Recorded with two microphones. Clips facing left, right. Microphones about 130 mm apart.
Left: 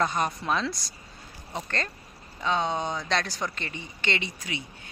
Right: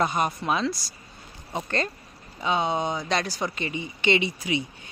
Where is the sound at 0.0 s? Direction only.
10° right (ahead or behind).